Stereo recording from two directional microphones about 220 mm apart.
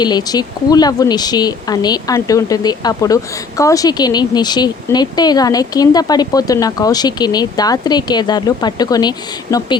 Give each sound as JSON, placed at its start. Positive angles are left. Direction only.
{"t": 0.0, "sound": "speech", "side_deg": 20}